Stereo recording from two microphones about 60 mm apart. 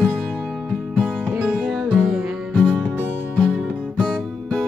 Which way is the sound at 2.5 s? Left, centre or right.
Left.